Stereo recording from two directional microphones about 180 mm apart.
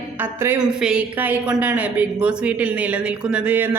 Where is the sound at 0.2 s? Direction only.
10° right (ahead or behind).